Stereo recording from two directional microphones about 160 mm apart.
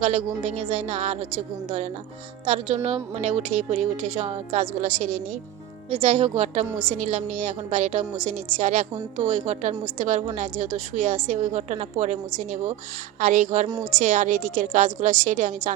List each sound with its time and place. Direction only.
0.0 s a woman's voice: 45° right (ahead or behind)
2.5 s a woman's voice: 45° right (ahead or behind)
6.7 s a woman's voice: 10° right (ahead or behind)
6.9 s a woman's voice: 45° right (ahead or behind)